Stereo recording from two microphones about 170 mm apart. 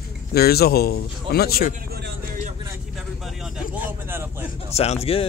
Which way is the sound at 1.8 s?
70° right (ahead or behind).